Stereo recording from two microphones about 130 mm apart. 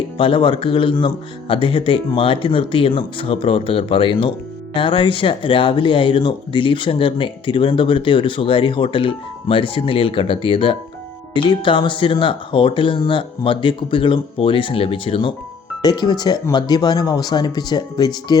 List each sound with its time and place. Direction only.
0.2 s speech: 40° left (ahead or behind)